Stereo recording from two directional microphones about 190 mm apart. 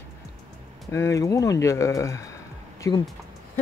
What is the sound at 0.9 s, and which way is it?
Speech, 15° left (ahead or behind).